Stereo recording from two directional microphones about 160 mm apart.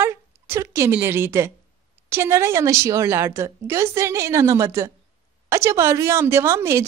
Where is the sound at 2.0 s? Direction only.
15° right (ahead or behind).